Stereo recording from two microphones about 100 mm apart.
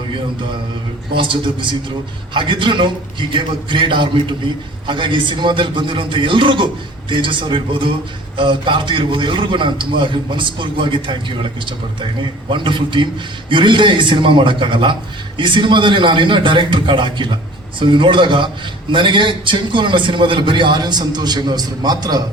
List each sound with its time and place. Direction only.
1.1 s a man's voice: 55° right (ahead or behind)
12.5 s a man's voice: 55° right (ahead or behind)